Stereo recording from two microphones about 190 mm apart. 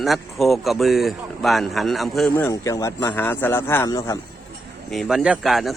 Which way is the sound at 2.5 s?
15° left (ahead or behind).